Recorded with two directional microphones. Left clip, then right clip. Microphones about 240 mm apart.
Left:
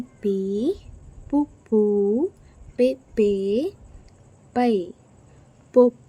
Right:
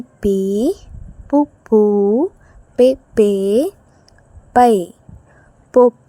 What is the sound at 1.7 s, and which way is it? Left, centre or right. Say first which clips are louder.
Speech: right 7 dB; right.